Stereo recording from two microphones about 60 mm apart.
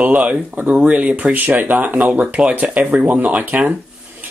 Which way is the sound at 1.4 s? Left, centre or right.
Right.